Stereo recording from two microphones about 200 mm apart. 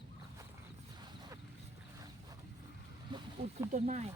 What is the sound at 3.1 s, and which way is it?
Speech, 30° right (ahead or behind).